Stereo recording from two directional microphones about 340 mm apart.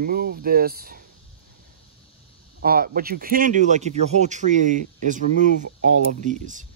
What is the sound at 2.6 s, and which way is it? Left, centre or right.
Speech, right.